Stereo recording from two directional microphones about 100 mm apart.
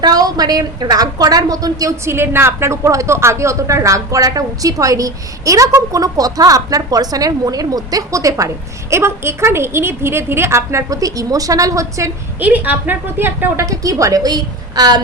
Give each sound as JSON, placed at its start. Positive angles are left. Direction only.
{"t": 0.0, "sound": "a woman's voice", "side_deg": -40}
{"t": 2.0, "sound": "a woman's voice", "side_deg": -25}
{"t": 12.4, "sound": "a woman's voice", "side_deg": -15}
{"t": 13.7, "sound": "a woman's voice", "side_deg": -35}